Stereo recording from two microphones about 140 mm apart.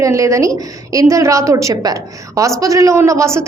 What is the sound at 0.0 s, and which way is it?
A woman's voice, 20° right (ahead or behind).